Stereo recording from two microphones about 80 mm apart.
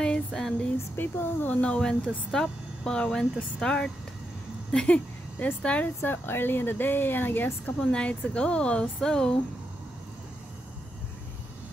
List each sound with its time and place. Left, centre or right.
0.0 s female singing: centre
0.9 s speech: left
5.9 s speech: left
7.9 s speech: centre